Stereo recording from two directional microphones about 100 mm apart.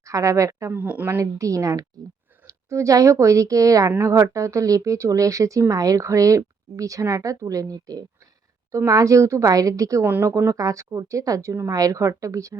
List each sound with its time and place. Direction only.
0.0 s speech: 30° right (ahead or behind)
0.7 s speech: 15° right (ahead or behind)
1.0 s speech: 30° right (ahead or behind)
10.1 s speech: 20° right (ahead or behind)
10.3 s speech: 35° right (ahead or behind)